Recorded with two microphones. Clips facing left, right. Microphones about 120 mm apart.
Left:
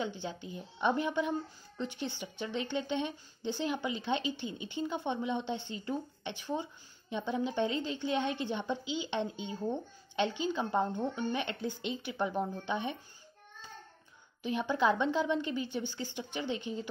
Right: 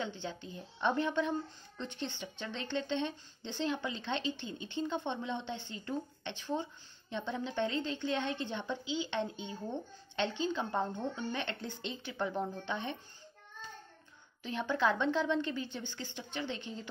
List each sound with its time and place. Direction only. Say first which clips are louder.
0.0 s speech: left 2 dB; 15° left (ahead or behind)
14.4 s speech: left 2 dB; 15° left (ahead or behind)